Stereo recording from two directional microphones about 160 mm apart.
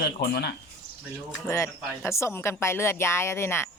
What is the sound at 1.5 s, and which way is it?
Speech, 15° left (ahead or behind).